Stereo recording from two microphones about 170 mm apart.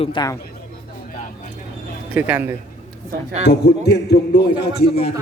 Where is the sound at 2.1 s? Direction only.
10° right (ahead or behind).